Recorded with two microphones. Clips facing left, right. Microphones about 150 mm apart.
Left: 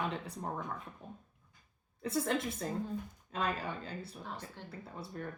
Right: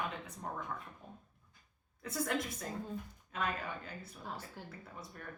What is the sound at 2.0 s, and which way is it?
A woman's voice, 25° left (ahead or behind).